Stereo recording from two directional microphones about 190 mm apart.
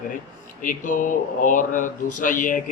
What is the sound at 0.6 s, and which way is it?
Speech, 45° left (ahead or behind).